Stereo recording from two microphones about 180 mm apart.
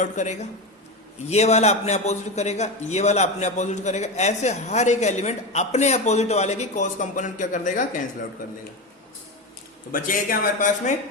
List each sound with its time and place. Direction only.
0.0 s a man's voice: 40° left (ahead or behind)
9.9 s speech: 50° left (ahead or behind)